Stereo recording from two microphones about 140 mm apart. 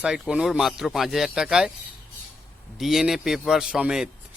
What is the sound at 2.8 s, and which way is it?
Speech, centre (ahead or behind).